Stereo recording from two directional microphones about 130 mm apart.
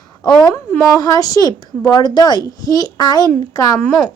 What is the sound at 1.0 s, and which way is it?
A child's voice, 30° left (ahead or behind).